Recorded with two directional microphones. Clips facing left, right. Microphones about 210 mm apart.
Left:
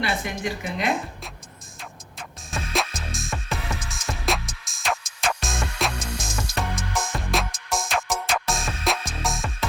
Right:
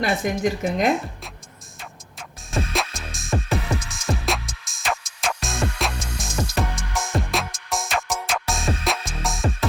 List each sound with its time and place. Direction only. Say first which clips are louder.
0.3 s speech: right 7 dB; 45° right (ahead or behind)
0.9 s speech: right 4 dB; centre (ahead or behind)
1.8 s music: even; centre (ahead or behind)